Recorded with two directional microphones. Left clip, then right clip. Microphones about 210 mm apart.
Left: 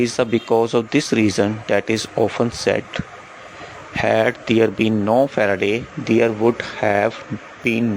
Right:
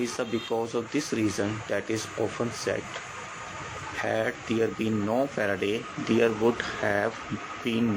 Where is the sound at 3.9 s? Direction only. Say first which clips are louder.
Left 12 dB; 45° left (ahead or behind).